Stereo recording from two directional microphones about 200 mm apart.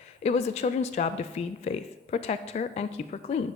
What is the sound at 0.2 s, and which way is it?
A woman's voice, 35° left (ahead or behind).